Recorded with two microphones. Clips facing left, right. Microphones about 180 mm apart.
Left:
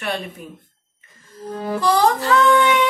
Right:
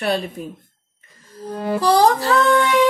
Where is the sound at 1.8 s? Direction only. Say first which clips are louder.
Right 2 dB; 35° right (ahead or behind).